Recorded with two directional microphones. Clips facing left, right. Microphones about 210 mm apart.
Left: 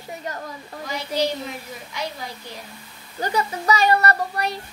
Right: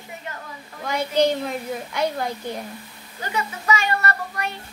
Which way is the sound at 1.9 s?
55° right (ahead or behind).